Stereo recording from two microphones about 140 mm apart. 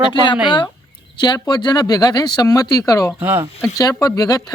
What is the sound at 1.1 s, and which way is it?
Speech, 30° left (ahead or behind).